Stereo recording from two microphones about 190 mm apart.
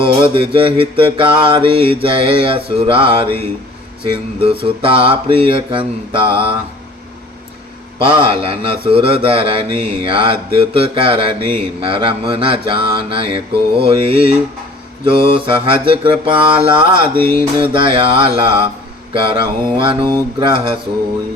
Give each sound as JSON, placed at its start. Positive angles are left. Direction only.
{"t": 0.0, "sound": "a man's voice", "side_deg": -30}
{"t": 7.9, "sound": "a man's voice", "side_deg": -25}